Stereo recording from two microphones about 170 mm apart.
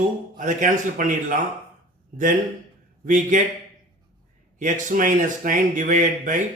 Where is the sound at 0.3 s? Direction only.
50° right (ahead or behind).